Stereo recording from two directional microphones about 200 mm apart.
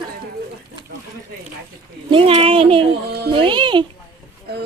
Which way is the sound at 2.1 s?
25° right (ahead or behind).